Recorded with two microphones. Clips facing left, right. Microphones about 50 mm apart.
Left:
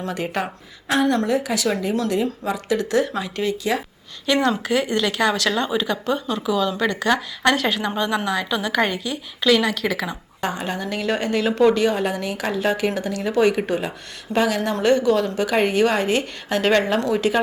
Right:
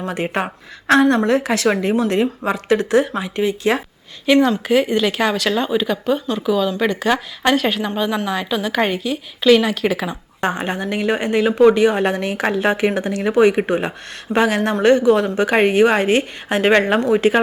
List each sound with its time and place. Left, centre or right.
0.1 s a woman's voice: right
0.9 s a woman's voice: right
1.3 s speech: right
3.2 s a woman's voice: right
4.4 s speech: centre
9.8 s a woman's voice: right
12.0 s a woman's voice: right